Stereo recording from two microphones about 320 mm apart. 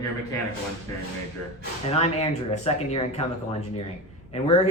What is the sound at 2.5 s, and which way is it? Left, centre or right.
Speech, left.